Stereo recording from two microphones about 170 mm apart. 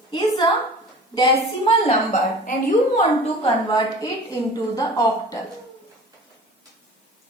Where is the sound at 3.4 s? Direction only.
25° left (ahead or behind).